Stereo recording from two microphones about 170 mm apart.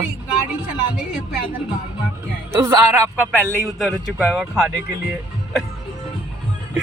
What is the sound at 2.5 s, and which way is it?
Speech, 15° right (ahead or behind).